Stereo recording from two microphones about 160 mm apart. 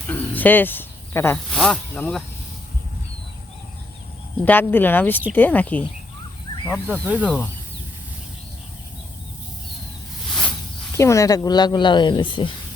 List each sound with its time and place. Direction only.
0.1 s a sound: 10° left (ahead or behind)
1.5 s speech: centre (ahead or behind)
4.4 s speech: 10° left (ahead or behind)
7.0 s speech: 10° right (ahead or behind)
7.3 s speech: 10° left (ahead or behind)
10.2 s a sound: 5° left (ahead or behind)
10.9 s speech: 20° left (ahead or behind)